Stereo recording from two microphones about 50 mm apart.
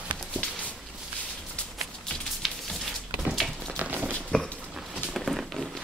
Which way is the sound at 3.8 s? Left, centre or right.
Right.